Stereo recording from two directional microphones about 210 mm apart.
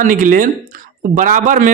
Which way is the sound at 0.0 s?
40° right (ahead or behind).